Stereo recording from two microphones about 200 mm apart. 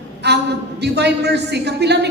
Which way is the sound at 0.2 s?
55° right (ahead or behind).